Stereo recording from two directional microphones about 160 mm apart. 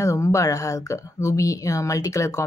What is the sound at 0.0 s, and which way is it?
Speech, 20° left (ahead or behind).